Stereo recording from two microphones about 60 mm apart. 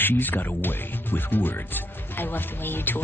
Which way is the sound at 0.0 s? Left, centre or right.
Left.